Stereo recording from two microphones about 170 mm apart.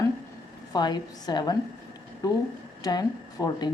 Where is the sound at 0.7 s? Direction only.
25° left (ahead or behind).